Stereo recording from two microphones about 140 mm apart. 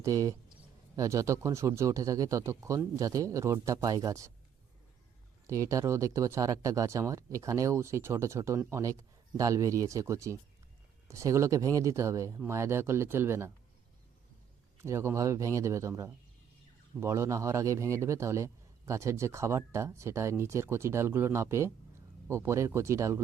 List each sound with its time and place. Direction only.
0.0 s speech: 25° right (ahead or behind)
5.5 s speech: 20° right (ahead or behind)
14.8 s speech: 20° right (ahead or behind)